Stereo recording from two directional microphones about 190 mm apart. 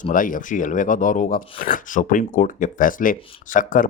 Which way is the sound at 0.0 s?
45° left (ahead or behind).